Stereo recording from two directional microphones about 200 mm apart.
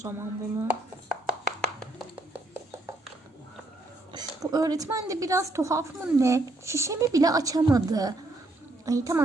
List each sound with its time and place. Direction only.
0.0 s speech: 10° right (ahead or behind)
2.3 s a sound: 10° right (ahead or behind)
4.1 s speech: 20° right (ahead or behind)